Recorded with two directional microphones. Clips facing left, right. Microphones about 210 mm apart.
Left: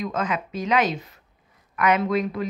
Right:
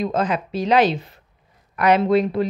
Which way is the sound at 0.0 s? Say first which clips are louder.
Right 5 dB; 35° right (ahead or behind).